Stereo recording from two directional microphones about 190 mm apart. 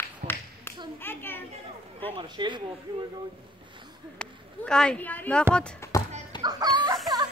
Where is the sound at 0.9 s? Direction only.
10° left (ahead or behind).